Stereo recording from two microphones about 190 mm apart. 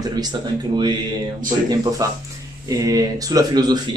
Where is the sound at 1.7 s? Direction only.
20° right (ahead or behind).